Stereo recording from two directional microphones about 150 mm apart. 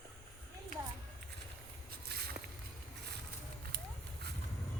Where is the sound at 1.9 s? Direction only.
90° right.